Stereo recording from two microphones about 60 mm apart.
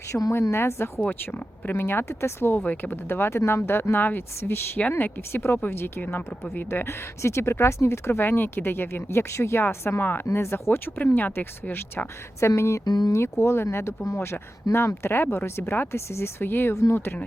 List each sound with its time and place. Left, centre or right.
0.1 s a woman's voice: left
0.5 s speech: left
1.0 s speech: left
4.8 s speech: left
12.4 s speech: left
14.3 s speech: left
16.4 s speech: left